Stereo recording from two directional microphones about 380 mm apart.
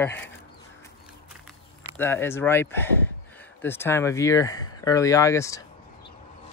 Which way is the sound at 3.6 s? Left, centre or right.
Centre.